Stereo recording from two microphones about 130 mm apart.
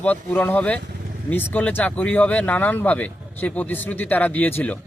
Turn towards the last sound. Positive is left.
turn(degrees=15)  # may be behind; listen again after turning